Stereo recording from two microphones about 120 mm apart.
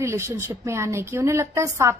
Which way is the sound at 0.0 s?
25° right (ahead or behind).